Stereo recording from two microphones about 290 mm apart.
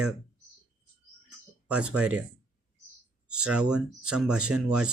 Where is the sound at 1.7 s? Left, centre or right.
Centre.